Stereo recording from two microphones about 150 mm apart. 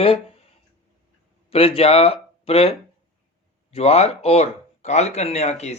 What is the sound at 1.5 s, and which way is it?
Speech, 40° left (ahead or behind).